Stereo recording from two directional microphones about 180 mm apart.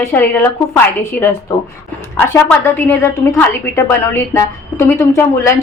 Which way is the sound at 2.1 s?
10° left (ahead or behind).